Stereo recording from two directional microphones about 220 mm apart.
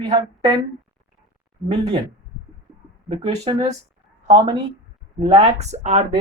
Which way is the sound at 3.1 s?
25° right (ahead or behind).